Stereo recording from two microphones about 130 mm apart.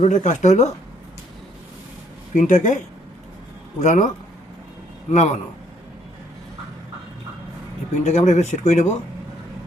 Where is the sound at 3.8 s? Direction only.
70° left (ahead or behind).